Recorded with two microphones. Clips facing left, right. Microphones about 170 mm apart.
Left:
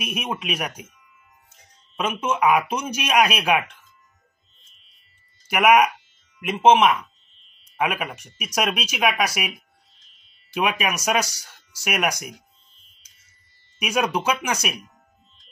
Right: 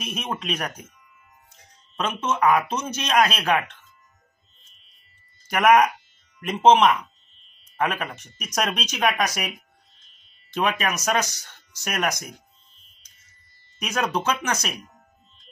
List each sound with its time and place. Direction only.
0.0 s speech: 10° left (ahead or behind)
2.0 s speech: 10° left (ahead or behind)
5.5 s speech: 10° left (ahead or behind)
10.5 s speech: 10° left (ahead or behind)
13.7 s speech: 10° left (ahead or behind)